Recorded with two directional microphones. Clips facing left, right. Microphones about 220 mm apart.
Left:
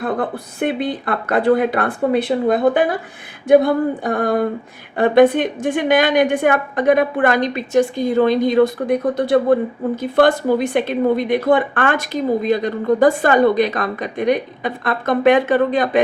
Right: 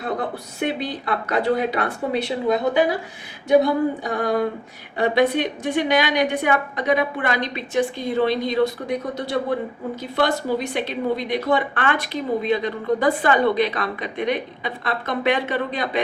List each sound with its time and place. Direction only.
0.0 s a woman's voice: 55° left (ahead or behind)